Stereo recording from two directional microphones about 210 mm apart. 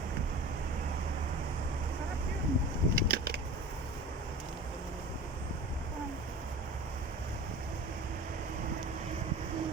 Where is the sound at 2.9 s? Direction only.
50° right (ahead or behind).